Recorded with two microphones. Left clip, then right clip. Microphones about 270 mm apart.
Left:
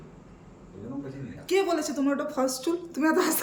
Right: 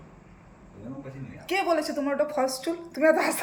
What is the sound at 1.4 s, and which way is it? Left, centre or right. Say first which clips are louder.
A woman's voice: even; centre.